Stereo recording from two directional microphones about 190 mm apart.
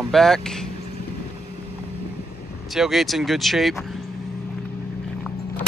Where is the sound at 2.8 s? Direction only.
Centre (ahead or behind).